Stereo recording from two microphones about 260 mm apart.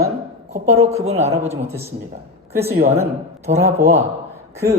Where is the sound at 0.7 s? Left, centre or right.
Right.